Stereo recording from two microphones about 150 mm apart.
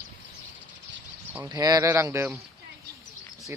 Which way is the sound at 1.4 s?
25° right (ahead or behind).